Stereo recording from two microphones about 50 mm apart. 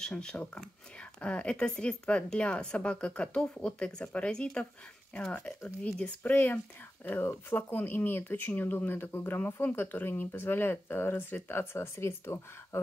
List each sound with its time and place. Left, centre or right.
0.0 s speech: centre
4.3 s speech: centre
5.9 s speech: left
6.3 s speech: left